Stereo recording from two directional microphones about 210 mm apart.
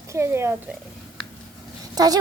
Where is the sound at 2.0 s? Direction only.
15° right (ahead or behind).